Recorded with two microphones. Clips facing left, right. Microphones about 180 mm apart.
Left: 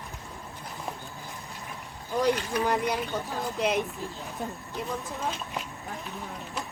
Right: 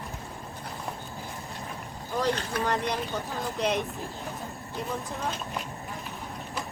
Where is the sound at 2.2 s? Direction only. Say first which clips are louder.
Left 3 dB; 10° left (ahead or behind).